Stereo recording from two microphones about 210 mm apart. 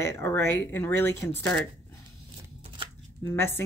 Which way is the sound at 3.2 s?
10° left (ahead or behind).